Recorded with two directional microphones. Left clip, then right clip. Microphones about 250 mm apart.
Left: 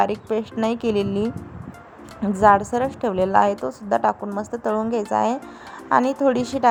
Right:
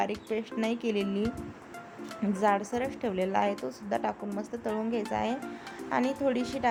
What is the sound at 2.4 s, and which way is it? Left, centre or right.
A woman's voice, centre.